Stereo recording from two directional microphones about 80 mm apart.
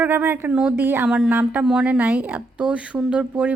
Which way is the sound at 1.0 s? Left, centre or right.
Centre.